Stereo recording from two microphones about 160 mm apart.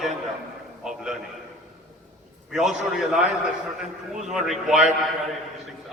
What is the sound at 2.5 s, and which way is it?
A man's voice, 5° right (ahead or behind).